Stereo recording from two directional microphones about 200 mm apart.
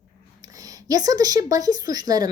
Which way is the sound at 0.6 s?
20° right (ahead or behind).